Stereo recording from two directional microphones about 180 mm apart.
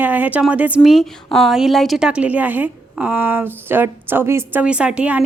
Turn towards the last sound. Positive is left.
turn(degrees=-5)  # may be behind; listen again after turning